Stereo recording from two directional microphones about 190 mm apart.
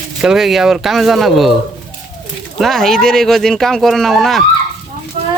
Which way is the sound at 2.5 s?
Centre (ahead or behind).